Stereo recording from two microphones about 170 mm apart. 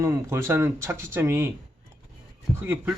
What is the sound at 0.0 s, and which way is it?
Speech, 15° right (ahead or behind).